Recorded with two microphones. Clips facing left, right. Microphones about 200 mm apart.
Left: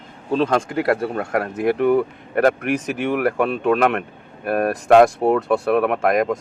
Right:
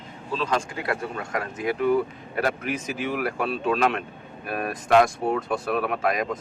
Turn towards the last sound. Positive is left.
turn(degrees=55)  # may be behind; listen again after turning